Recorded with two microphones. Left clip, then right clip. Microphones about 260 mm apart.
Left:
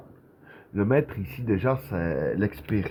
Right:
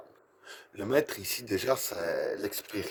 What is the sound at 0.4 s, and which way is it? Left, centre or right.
Speech, right.